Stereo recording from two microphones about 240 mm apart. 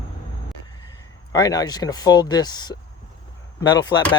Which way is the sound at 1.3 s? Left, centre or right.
Centre.